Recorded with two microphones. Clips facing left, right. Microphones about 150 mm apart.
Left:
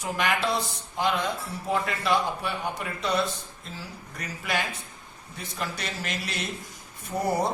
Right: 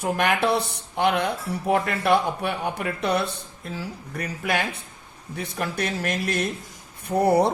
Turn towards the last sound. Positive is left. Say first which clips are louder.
# right 7 dB
turn(degrees=-65)  # may be behind; listen again after turning